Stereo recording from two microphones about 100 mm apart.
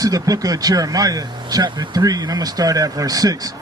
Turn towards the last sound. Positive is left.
turn(degrees=-40)  # may be behind; listen again after turning